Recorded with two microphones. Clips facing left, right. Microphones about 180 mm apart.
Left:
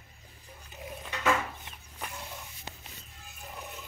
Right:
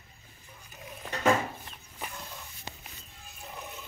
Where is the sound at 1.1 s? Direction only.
35° right (ahead or behind).